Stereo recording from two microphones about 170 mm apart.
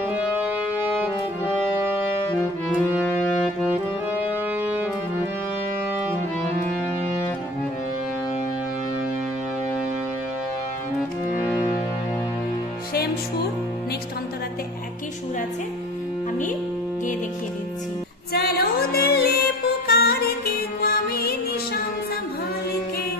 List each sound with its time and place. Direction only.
0.8 s brass instrument: 10° right (ahead or behind)
4.2 s music: 10° right (ahead or behind)
12.9 s music: 65° left (ahead or behind)
18.3 s music: 65° left (ahead or behind)